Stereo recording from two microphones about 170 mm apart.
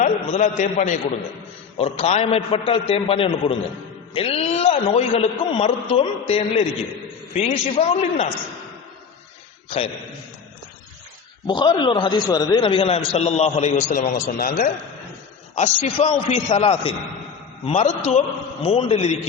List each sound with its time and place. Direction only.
0.0 s a man's voice: 40° left (ahead or behind)
9.6 s a man's voice: 35° left (ahead or behind)
11.4 s a man's voice: 25° left (ahead or behind); by 14.1 s 45° left (ahead or behind)
14.1 s a man's voice: 60° left (ahead or behind)
15.5 s a man's voice: 40° left (ahead or behind)